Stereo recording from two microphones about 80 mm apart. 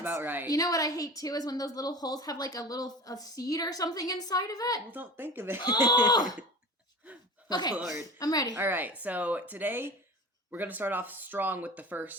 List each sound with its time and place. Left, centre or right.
0.0 s speech: right
0.4 s a woman's voice: left
4.9 s speech: right
5.7 s speech: left
7.5 s a woman's voice: left
8.5 s speech: right